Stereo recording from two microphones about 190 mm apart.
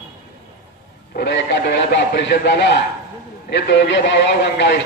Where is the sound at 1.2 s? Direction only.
65° left (ahead or behind).